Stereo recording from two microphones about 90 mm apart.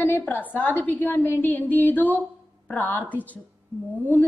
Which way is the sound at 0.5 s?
20° left (ahead or behind).